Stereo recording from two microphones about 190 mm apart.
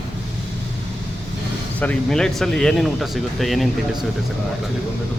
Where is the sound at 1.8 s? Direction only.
5° left (ahead or behind).